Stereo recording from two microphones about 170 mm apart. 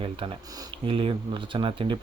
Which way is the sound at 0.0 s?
30° right (ahead or behind).